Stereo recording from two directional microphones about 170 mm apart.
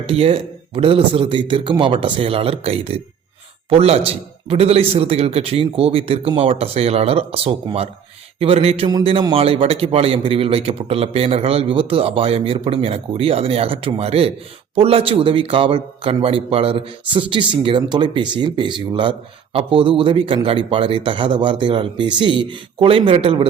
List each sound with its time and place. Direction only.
0.1 s a man's voice: 35° right (ahead or behind)